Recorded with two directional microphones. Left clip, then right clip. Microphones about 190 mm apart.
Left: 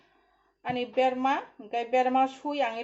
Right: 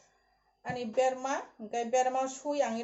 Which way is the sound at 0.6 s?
35° left (ahead or behind).